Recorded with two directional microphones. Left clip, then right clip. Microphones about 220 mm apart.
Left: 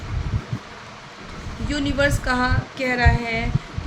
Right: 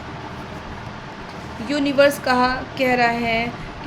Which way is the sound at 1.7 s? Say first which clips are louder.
Right 5 dB; 10° left (ahead or behind).